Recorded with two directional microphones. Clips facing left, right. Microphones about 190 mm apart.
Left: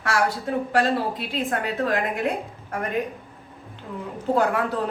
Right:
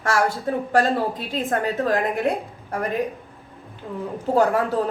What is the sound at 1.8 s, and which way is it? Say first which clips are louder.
A woman's voice: right 1 dB; 35° right (ahead or behind).